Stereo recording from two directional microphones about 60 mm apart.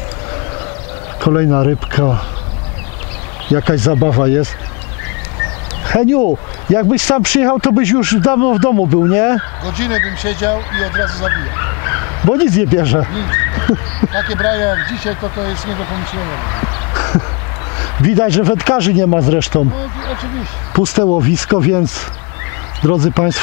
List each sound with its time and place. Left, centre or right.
1.2 s speech: left
3.5 s speech: centre
5.9 s speech: centre
16.9 s a sound: left
18.0 s speech: centre
20.7 s speech: centre